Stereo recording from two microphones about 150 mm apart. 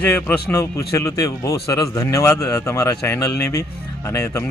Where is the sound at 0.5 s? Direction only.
20° left (ahead or behind).